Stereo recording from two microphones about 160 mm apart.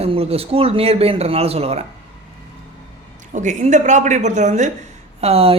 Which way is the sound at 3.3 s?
50° right (ahead or behind).